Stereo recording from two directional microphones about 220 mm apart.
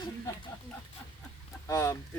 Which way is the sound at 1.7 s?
15° left (ahead or behind).